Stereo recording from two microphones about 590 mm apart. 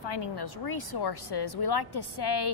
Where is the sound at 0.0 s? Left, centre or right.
Left.